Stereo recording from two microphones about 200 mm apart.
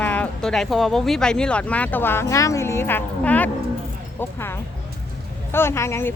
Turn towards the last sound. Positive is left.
turn(degrees=15)  # may be behind; listen again after turning